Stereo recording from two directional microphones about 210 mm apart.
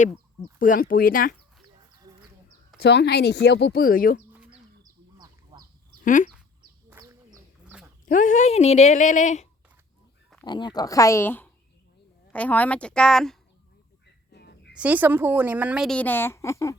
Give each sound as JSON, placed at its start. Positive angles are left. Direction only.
{"t": 0.6, "sound": "speech", "side_deg": 40}
{"t": 2.7, "sound": "speech", "side_deg": 55}
{"t": 4.8, "sound": "duck", "side_deg": -20}
{"t": 6.1, "sound": "speech", "side_deg": 35}
{"t": 6.9, "sound": "bird", "side_deg": -15}
{"t": 7.3, "sound": "bird", "side_deg": -5}
{"t": 8.0, "sound": "speech", "side_deg": 35}
{"t": 10.4, "sound": "a woman's voice", "side_deg": 20}
{"t": 14.3, "sound": "a sound", "side_deg": 50}
{"t": 14.7, "sound": "a woman's voice", "side_deg": -5}